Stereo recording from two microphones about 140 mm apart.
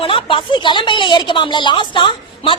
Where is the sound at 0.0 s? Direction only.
40° left (ahead or behind).